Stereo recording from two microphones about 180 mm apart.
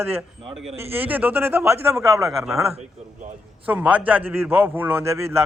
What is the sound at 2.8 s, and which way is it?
Speech, 45° right (ahead or behind).